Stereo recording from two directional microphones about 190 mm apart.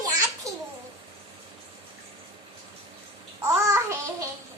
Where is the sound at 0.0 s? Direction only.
15° right (ahead or behind).